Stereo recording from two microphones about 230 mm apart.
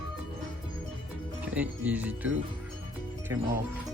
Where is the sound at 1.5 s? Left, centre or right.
Centre.